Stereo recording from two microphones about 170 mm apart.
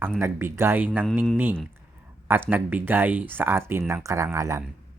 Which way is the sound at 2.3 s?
10° right (ahead or behind).